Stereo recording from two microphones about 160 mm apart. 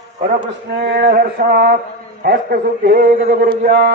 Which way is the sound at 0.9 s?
75° right (ahead or behind).